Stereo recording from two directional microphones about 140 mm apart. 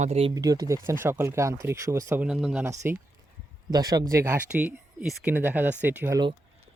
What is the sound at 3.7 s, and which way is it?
Speech, 25° right (ahead or behind).